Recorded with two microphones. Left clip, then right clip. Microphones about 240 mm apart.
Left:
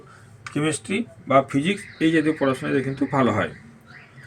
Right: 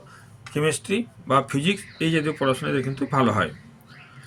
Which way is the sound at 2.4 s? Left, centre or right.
Right.